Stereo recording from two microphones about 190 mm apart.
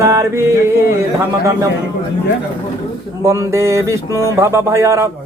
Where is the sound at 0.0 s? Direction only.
15° right (ahead or behind).